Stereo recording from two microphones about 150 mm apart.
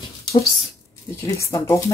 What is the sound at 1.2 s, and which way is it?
Speech, 20° left (ahead or behind).